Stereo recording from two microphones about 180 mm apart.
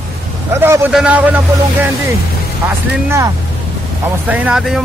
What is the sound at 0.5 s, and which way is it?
Speech, 15° right (ahead or behind).